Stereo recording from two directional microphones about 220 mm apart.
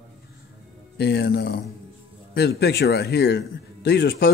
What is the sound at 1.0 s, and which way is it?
Speech, 45° left (ahead or behind).